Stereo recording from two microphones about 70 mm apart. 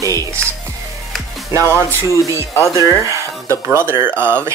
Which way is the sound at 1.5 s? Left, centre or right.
Right.